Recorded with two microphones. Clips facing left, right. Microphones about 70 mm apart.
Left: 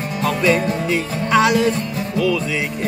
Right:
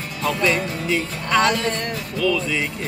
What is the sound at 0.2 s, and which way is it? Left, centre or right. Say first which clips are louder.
Music: left 3 dB; centre.